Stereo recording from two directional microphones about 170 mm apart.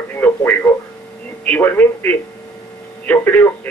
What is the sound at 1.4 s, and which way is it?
Speech, 10° left (ahead or behind).